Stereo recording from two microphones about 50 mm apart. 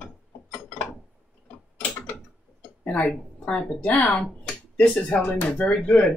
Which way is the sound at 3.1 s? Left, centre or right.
Centre.